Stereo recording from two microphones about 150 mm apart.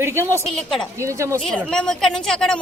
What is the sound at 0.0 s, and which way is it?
Speech, 15° right (ahead or behind).